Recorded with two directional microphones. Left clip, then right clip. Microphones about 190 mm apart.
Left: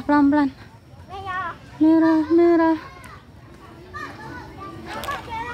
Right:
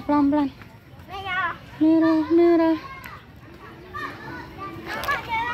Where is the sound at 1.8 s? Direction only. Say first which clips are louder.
Left 2 dB; 15° left (ahead or behind).